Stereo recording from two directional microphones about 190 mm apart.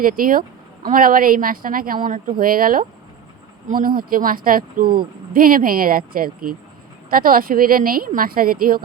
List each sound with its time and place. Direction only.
0.0 s speech: 50° right (ahead or behind)